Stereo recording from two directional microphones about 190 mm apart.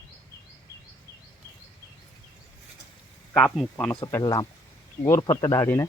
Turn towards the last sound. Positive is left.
turn(degrees=20)  # may be behind; listen again after turning